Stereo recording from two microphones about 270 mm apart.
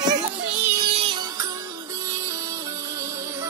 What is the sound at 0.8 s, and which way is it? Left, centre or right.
Music, right.